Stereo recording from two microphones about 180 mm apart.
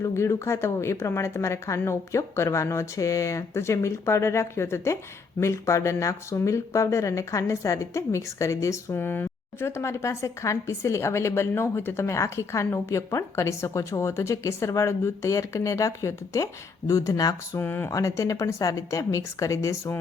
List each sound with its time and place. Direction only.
0.0 s speech: 15° left (ahead or behind)